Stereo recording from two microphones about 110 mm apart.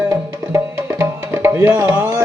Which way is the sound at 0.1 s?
25° right (ahead or behind).